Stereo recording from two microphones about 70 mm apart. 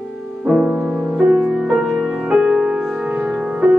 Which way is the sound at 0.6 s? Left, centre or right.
Centre.